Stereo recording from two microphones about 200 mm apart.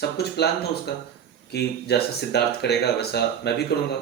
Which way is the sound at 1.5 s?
55° left (ahead or behind).